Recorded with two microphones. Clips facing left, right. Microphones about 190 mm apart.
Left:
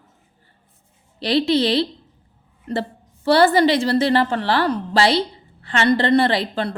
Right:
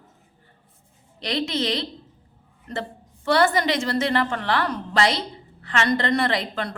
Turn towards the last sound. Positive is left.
turn(degrees=30)  # may be behind; listen again after turning